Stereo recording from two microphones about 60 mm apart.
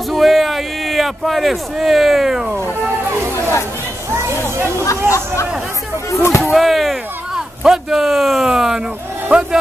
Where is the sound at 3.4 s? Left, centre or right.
Left.